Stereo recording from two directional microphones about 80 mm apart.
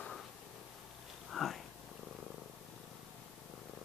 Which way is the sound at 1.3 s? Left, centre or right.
Centre.